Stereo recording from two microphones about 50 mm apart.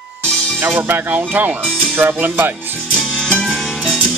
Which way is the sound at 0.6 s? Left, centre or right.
Right.